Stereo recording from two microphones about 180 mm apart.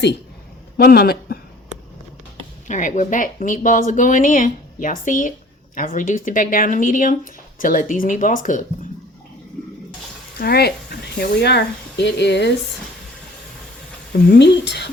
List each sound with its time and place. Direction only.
0.8 s speech: 60° left (ahead or behind)
2.6 s speech: 45° left (ahead or behind)
10.4 s speech: 60° left (ahead or behind)
14.3 s speech: 70° left (ahead or behind)